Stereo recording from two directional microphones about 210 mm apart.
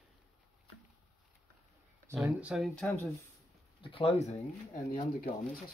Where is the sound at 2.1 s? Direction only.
5° right (ahead or behind).